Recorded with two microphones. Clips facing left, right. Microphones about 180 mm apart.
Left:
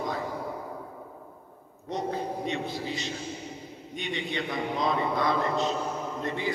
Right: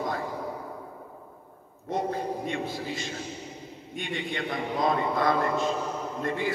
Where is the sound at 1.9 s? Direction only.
50° right (ahead or behind).